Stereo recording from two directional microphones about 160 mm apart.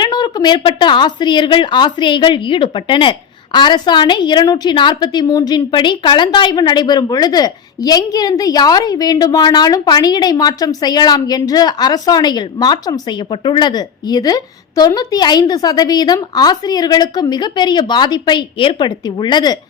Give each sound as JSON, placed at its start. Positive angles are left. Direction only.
{"t": 0.0, "sound": "speech", "side_deg": 25}